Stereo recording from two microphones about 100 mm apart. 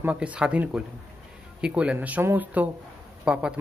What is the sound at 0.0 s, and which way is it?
A man's voice, 15° right (ahead or behind).